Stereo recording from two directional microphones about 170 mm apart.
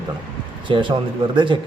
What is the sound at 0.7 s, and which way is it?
Speech, 30° right (ahead or behind).